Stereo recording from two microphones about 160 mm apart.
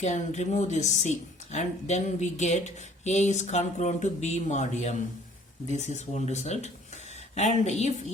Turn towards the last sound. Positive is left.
turn(degrees=45)  # may be behind; listen again after turning